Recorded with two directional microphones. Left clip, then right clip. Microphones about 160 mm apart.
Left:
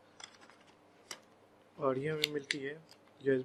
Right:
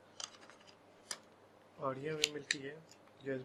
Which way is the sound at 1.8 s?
55° left (ahead or behind).